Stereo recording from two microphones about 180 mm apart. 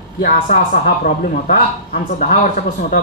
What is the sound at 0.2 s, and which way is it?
A man's voice, 50° left (ahead or behind).